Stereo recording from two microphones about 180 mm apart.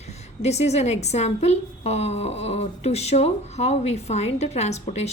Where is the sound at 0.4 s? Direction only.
35° left (ahead or behind).